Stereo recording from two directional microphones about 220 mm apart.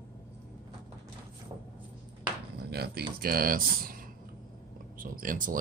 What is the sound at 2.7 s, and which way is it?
Speech, 45° right (ahead or behind).